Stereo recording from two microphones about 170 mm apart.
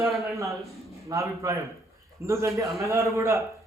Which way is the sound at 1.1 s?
20° right (ahead or behind).